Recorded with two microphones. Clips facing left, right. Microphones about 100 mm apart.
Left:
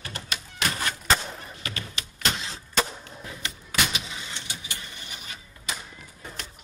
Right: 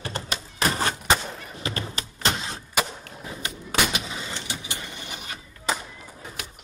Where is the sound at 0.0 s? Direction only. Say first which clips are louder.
Right 4 dB; 30° right (ahead or behind).